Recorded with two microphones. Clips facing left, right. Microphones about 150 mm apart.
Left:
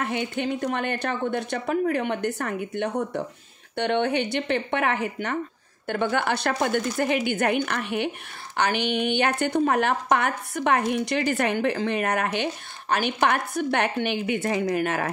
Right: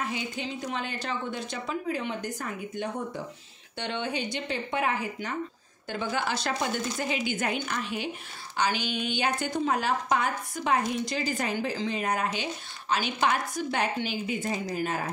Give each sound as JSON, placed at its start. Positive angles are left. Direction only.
{"t": 0.0, "sound": "a woman's voice", "side_deg": 60}